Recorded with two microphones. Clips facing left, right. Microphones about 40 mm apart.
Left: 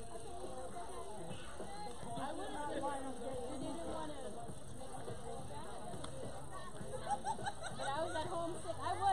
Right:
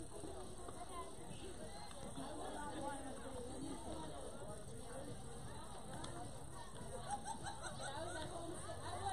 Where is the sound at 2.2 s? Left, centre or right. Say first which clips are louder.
Left 5 dB; left.